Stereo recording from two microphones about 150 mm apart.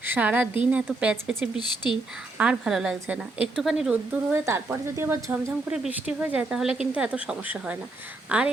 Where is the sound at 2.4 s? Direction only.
5° right (ahead or behind).